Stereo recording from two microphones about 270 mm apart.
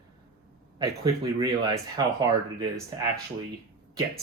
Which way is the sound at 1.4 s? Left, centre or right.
Centre.